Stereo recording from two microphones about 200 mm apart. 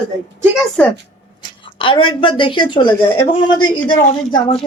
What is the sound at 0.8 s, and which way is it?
Speech, 5° left (ahead or behind).